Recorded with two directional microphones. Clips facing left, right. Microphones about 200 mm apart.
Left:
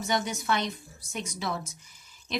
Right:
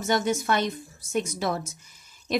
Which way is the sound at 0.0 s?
50° right (ahead or behind).